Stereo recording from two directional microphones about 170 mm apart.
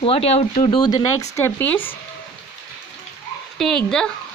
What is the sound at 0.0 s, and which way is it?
Speech, 35° left (ahead or behind).